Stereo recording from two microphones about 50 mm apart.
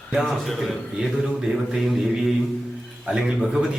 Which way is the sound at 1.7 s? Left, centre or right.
Centre.